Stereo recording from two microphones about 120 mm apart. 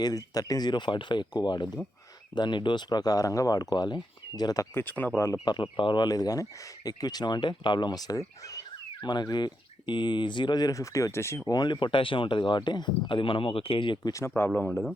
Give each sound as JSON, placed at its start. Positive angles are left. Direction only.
{"t": 0.0, "sound": "speech", "side_deg": 30}
{"t": 4.7, "sound": "speech", "side_deg": 15}
{"t": 5.5, "sound": "speech", "side_deg": 40}
{"t": 14.1, "sound": "a man's voice", "side_deg": 20}